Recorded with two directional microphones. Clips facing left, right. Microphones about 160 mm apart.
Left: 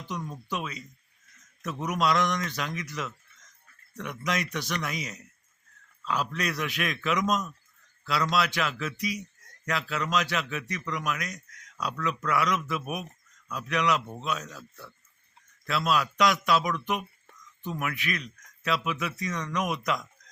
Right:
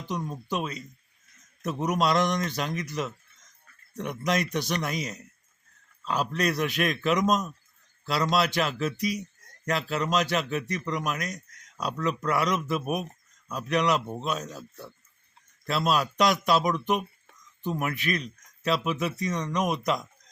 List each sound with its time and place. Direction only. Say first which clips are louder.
0.1 s speech: right 3 dB; 25° right (ahead or behind)